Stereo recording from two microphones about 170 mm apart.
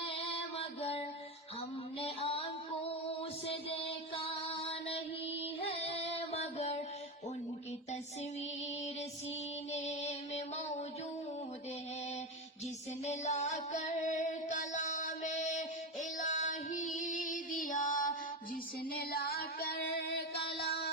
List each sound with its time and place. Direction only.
0.0 s music: 35° left (ahead or behind)
2.0 s child singing: 35° left (ahead or behind)
3.2 s music: 35° left (ahead or behind)
8.4 s music: 40° left (ahead or behind)
13.1 s music: 45° left (ahead or behind); by 20.9 s 65° left (ahead or behind)